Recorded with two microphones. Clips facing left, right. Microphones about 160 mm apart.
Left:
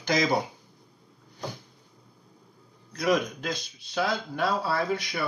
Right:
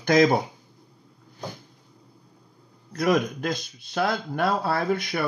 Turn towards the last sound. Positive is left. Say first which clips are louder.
# right 3 dB
turn(degrees=-55)  # may be behind; listen again after turning